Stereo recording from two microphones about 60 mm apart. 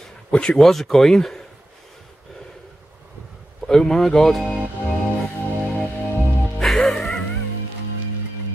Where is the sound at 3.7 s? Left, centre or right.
Centre.